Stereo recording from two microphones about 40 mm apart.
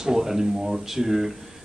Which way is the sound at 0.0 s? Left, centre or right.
Centre.